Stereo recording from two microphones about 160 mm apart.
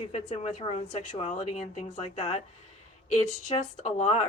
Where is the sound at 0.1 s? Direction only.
45° left (ahead or behind).